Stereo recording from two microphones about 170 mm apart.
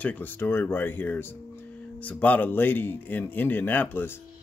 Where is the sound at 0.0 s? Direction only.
10° left (ahead or behind).